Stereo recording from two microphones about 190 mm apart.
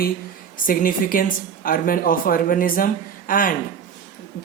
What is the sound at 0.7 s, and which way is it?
Speech, 45° left (ahead or behind).